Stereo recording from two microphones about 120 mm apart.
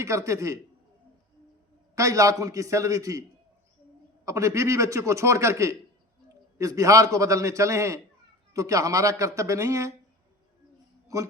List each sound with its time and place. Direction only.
0.0 s a man's voice: 25° right (ahead or behind)
2.0 s a man's voice: 25° right (ahead or behind)
4.3 s a man's voice: 25° right (ahead or behind)